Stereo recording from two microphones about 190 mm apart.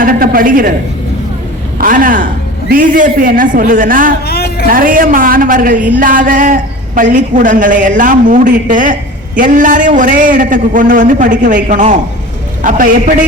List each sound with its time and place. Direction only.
0.0 s a sound: 50° right (ahead or behind)
1.8 s speech: 45° right (ahead or behind)
4.3 s music: 55° left (ahead or behind)
4.7 s speech: 45° right (ahead or behind)